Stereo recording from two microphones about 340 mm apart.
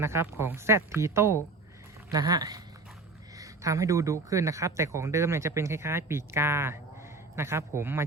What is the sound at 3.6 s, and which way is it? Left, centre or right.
Speech, centre.